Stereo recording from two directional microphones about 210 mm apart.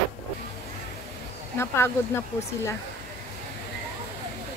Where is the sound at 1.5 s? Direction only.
10° left (ahead or behind).